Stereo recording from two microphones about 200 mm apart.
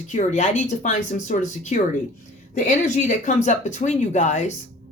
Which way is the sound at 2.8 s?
35° left (ahead or behind).